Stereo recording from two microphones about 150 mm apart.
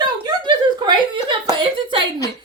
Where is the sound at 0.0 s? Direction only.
30° right (ahead or behind).